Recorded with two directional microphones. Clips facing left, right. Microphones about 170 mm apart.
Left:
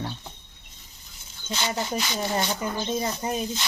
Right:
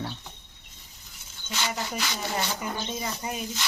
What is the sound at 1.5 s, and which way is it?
Speech, 20° left (ahead or behind).